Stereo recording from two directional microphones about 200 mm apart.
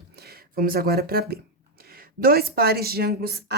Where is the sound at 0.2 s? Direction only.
50° right (ahead or behind).